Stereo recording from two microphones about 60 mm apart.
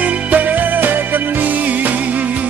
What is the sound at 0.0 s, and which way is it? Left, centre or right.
Music, right.